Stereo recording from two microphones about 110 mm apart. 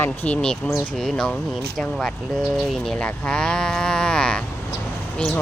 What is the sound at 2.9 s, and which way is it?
Speech, 10° left (ahead or behind).